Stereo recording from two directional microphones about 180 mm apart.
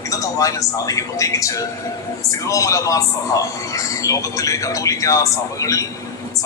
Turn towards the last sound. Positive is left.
turn(degrees=20)  # may be behind; listen again after turning